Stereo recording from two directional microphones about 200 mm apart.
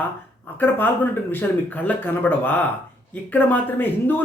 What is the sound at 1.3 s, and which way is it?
Speech, 10° left (ahead or behind).